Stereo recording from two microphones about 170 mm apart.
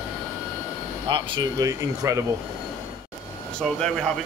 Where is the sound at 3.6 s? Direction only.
5° left (ahead or behind).